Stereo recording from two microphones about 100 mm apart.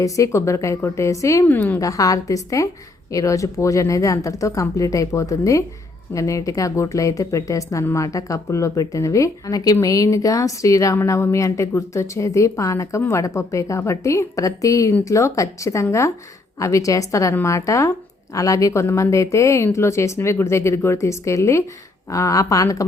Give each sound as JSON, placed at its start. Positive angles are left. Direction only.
{"t": 0.0, "sound": "a woman's voice", "side_deg": 30}
{"t": 1.5, "sound": "a woman's voice", "side_deg": 20}
{"t": 1.8, "sound": "a woman's voice", "side_deg": 35}